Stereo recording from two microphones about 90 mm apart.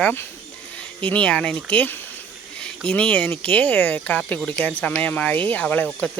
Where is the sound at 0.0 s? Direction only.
20° left (ahead or behind).